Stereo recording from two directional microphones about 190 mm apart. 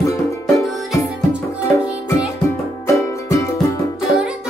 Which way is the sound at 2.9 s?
15° left (ahead or behind).